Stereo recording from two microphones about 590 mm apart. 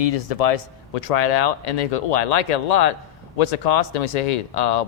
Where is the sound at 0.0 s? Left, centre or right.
Left.